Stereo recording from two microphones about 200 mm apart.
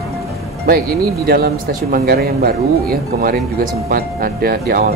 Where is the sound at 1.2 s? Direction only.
45° right (ahead or behind).